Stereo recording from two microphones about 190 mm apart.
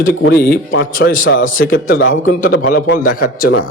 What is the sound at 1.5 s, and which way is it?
Speech, 50° left (ahead or behind).